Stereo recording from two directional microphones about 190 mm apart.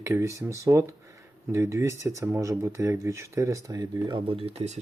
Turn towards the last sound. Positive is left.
turn(degrees=-35)  # may be behind; listen again after turning